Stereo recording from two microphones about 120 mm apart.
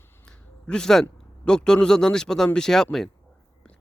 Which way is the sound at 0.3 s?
5° left (ahead or behind).